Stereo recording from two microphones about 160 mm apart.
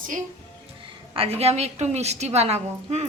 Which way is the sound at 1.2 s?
40° right (ahead or behind).